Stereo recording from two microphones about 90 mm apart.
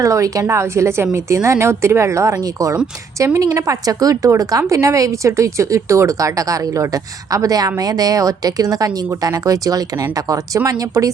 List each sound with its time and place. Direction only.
0.0 s a woman's voice: 35° right (ahead or behind)